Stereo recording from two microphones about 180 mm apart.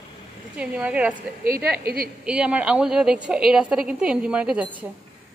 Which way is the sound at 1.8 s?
55° right (ahead or behind).